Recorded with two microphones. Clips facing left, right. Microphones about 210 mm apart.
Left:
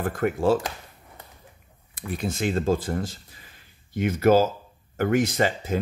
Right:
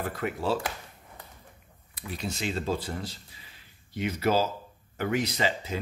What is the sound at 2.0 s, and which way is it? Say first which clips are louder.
Speech: left 6 dB; 50° left (ahead or behind).